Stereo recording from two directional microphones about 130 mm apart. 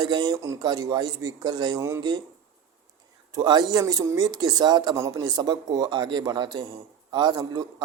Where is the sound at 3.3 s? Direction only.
35° right (ahead or behind).